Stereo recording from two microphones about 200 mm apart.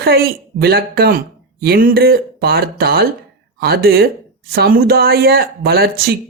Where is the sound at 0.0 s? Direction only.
50° right (ahead or behind).